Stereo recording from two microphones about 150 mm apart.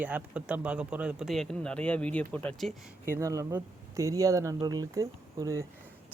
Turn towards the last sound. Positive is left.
turn(degrees=-20)  # may be behind; listen again after turning